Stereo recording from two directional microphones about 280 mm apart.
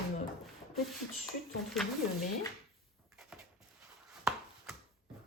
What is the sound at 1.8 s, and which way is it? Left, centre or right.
Speech, centre.